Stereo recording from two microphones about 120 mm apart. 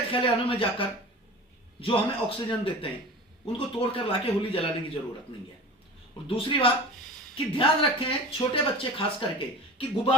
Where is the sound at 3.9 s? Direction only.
50° left (ahead or behind).